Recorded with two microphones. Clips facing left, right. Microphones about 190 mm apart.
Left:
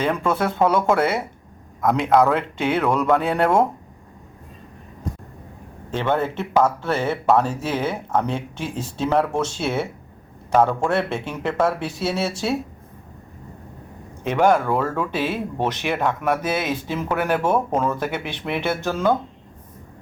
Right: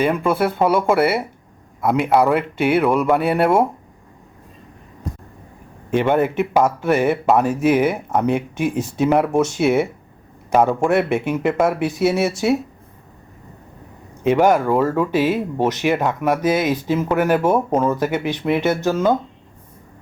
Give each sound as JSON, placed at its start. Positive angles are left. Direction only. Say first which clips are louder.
{"t": 0.0, "sound": "speech", "louder": "right 3 dB", "side_deg": -5}
{"t": 5.9, "sound": "speech", "louder": "right 5 dB", "side_deg": -15}
{"t": 14.3, "sound": "speech", "louder": "right 3 dB", "side_deg": -10}